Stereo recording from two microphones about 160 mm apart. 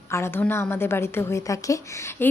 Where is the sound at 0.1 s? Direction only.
15° left (ahead or behind).